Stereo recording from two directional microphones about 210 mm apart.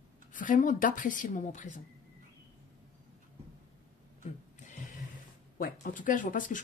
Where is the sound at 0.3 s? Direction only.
35° left (ahead or behind).